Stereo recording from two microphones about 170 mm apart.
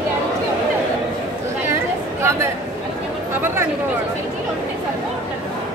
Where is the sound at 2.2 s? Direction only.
15° right (ahead or behind).